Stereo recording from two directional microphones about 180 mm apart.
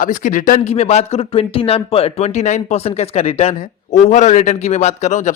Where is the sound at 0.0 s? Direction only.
50° left (ahead or behind).